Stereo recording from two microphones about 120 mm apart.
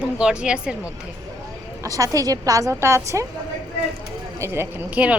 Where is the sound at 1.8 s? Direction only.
30° right (ahead or behind).